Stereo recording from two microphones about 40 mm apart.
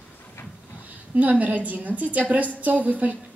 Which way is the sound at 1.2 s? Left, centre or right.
Right.